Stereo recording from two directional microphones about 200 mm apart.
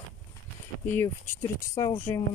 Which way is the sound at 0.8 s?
10° left (ahead or behind).